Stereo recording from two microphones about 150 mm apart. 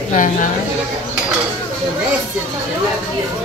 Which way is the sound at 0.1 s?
60° left (ahead or behind).